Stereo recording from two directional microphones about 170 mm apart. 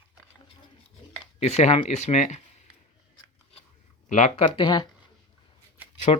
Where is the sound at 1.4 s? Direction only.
40° left (ahead or behind).